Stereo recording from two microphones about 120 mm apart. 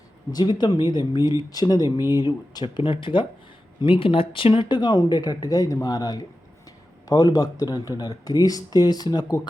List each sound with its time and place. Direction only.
0.3 s speech: 35° left (ahead or behind)